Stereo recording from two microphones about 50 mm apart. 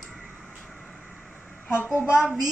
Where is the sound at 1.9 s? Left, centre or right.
Left.